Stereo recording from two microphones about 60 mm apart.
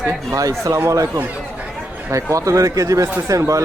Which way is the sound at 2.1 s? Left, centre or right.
Right.